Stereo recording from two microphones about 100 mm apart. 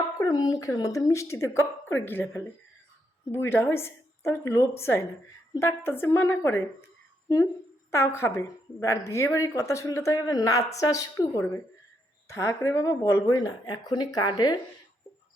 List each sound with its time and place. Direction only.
0.2 s a woman's voice: 45° left (ahead or behind); by 6.6 s 25° left (ahead or behind)
7.9 s a woman's voice: 25° left (ahead or behind); by 14.5 s 45° left (ahead or behind)